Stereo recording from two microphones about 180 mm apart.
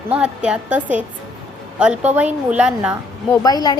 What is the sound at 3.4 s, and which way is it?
Speech, 20° left (ahead or behind).